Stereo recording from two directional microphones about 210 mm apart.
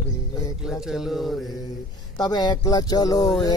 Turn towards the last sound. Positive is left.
turn(degrees=20)  # may be behind; listen again after turning